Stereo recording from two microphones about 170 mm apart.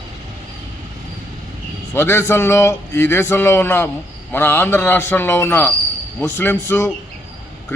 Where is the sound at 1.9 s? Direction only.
15° left (ahead or behind).